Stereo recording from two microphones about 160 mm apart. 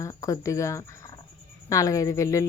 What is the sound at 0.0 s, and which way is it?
Speech, 20° left (ahead or behind).